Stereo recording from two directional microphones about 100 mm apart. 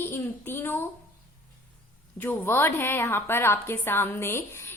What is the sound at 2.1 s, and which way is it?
A woman's voice, 20° left (ahead or behind).